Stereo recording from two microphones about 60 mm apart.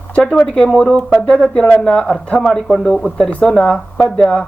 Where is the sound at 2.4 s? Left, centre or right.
Centre.